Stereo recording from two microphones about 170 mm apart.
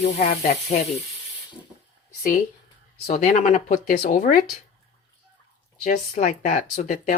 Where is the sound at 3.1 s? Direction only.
45° left (ahead or behind).